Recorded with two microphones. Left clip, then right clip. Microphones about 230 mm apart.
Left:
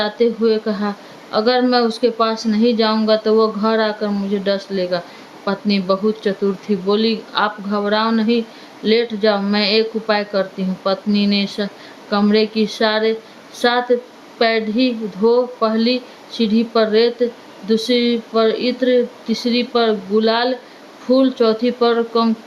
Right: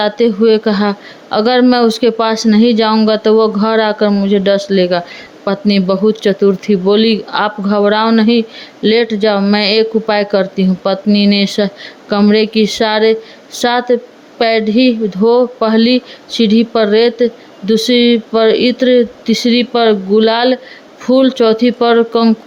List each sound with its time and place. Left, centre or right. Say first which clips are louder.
0.0 s speech: right 5 dB; right